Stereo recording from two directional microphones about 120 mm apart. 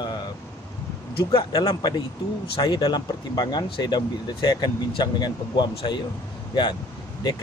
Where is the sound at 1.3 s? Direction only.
35° left (ahead or behind).